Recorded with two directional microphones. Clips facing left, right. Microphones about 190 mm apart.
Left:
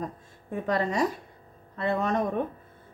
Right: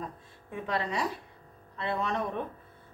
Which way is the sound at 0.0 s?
45° left (ahead or behind).